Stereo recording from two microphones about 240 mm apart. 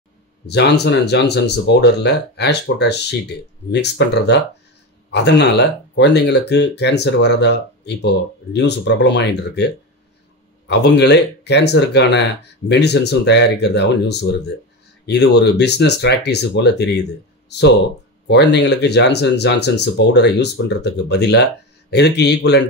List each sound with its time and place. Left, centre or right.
0.5 s speech: left
10.7 s speech: left